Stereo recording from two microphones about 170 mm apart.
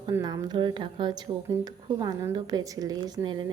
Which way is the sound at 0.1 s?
20° right (ahead or behind).